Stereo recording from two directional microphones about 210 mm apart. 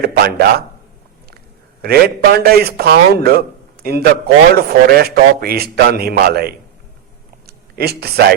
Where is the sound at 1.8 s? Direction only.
50° right (ahead or behind).